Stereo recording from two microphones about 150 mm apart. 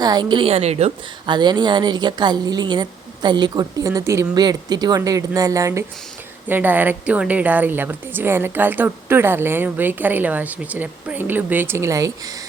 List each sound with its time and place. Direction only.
0.0 s a woman's voice: 25° right (ahead or behind); by 0.9 s 45° right (ahead or behind)
1.3 s a woman's voice: 30° right (ahead or behind)